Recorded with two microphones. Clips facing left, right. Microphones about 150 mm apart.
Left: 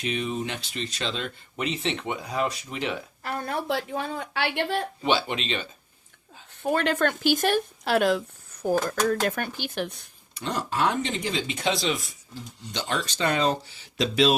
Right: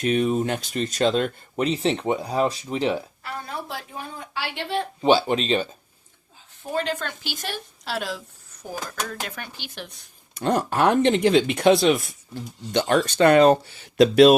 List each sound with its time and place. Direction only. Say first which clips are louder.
0.0 s speech: right 8 dB; 45° right (ahead or behind)
3.2 s a woman's voice: left 4 dB; 50° left (ahead or behind); by 4.6 s 70° left (ahead or behind)
5.0 s speech: right 8 dB; 40° right (ahead or behind)
6.6 s speech: left 4 dB; 65° left (ahead or behind)
10.3 s speech: right 6 dB; 50° right (ahead or behind)